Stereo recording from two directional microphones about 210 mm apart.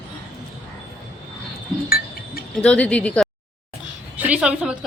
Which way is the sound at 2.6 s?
5° left (ahead or behind).